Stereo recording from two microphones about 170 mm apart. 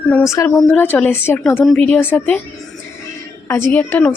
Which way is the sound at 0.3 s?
20° left (ahead or behind).